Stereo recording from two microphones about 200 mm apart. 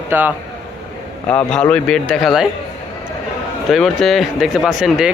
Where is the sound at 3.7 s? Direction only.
Centre (ahead or behind).